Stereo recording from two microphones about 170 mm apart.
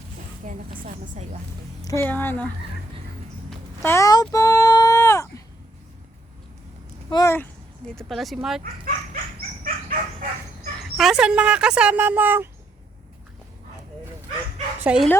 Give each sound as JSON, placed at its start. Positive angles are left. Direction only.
{"t": 0.9, "sound": "speech", "side_deg": -45}
{"t": 1.8, "sound": "speech", "side_deg": 15}
{"t": 3.8, "sound": "a sound", "side_deg": 20}
{"t": 7.1, "sound": "speech", "side_deg": 20}
{"t": 7.9, "sound": "speech", "side_deg": 0}
{"t": 9.6, "sound": "chicken", "side_deg": -55}
{"t": 10.9, "sound": "speech", "side_deg": 0}
{"t": 14.8, "sound": "speech", "side_deg": -5}